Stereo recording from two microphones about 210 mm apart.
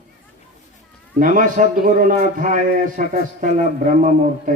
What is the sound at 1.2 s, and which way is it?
A man's voice, 40° right (ahead or behind).